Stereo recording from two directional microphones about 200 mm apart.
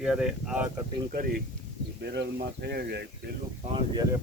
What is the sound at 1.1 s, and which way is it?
Speech, 45° right (ahead or behind).